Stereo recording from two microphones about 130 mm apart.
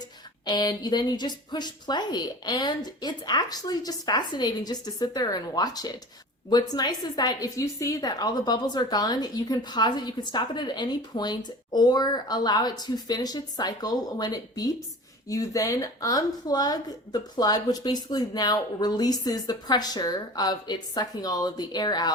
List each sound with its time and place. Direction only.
0.4 s a woman's voice: 30° left (ahead or behind)